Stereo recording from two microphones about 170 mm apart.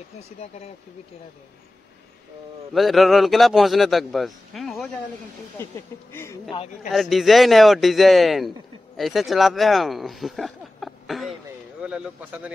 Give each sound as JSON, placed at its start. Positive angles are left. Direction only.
{"t": 2.7, "sound": "a man's voice", "side_deg": 0}
{"t": 6.1, "sound": "speech", "side_deg": 15}
{"t": 6.9, "sound": "a man's voice", "side_deg": 0}